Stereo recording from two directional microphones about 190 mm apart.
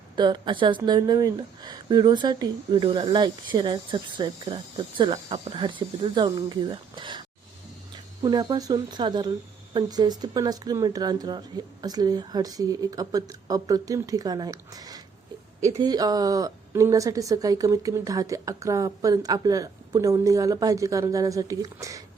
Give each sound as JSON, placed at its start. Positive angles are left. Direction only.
{"t": 0.2, "sound": "speech", "side_deg": -25}